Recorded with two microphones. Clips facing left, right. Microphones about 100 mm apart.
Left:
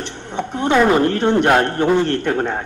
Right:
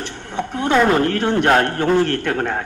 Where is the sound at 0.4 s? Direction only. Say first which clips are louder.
Left 1 dB; 5° right (ahead or behind).